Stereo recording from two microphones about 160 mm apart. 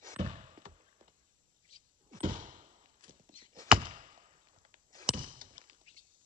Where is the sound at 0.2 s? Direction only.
50° right (ahead or behind).